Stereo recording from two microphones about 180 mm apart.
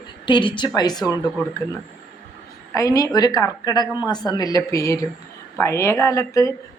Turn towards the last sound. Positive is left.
turn(degrees=20)  # may be behind; listen again after turning